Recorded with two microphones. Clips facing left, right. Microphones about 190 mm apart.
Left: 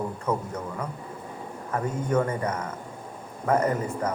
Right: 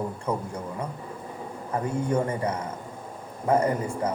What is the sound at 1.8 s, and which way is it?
Speech, 10° right (ahead or behind).